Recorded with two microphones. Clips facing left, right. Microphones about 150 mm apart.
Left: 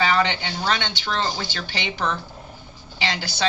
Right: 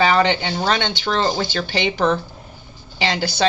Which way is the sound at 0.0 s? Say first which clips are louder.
Right 5 dB; 35° right (ahead or behind).